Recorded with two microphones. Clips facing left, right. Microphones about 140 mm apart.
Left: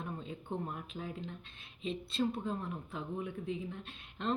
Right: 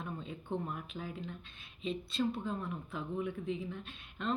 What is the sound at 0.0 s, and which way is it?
Speech, 25° left (ahead or behind).